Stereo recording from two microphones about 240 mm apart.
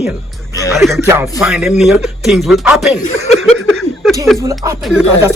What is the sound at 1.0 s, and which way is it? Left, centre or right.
Speech, centre.